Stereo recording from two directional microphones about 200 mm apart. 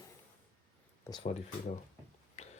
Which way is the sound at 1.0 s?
20° left (ahead or behind).